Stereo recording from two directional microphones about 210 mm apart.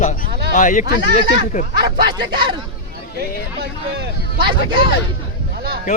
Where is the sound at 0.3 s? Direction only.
50° right (ahead or behind).